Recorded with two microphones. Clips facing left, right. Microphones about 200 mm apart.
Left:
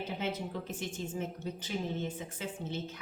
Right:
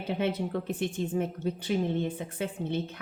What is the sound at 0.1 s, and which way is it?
A woman's voice, 60° right (ahead or behind).